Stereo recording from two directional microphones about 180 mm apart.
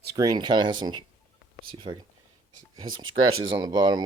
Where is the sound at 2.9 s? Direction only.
90° right.